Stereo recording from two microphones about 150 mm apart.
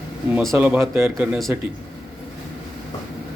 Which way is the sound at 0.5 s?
15° right (ahead or behind).